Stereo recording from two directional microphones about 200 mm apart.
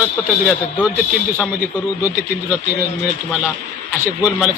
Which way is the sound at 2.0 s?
10° right (ahead or behind).